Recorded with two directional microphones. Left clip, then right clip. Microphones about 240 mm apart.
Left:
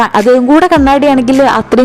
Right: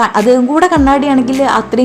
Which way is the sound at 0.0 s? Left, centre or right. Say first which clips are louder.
Left 2 dB; left.